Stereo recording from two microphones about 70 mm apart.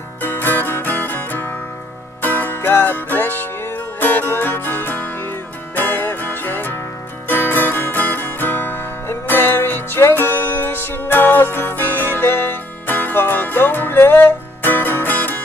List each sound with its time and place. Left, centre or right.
0.2 s music: left